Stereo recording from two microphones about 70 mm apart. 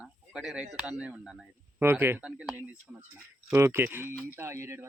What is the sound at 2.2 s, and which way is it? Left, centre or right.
Speech, centre.